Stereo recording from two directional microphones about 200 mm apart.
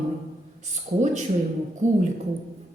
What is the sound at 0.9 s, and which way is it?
Speech, 40° right (ahead or behind).